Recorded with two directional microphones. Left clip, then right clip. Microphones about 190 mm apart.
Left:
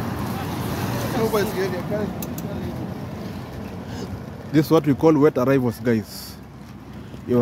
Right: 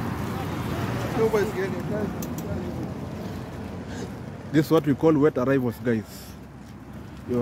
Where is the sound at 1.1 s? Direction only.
60° left (ahead or behind).